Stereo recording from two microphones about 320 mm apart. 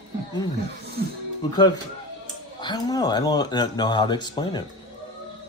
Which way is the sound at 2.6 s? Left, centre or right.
Centre.